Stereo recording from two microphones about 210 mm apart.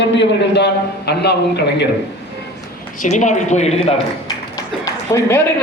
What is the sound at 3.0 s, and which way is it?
Speech, 35° left (ahead or behind).